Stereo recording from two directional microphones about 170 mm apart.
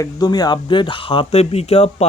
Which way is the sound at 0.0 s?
25° left (ahead or behind).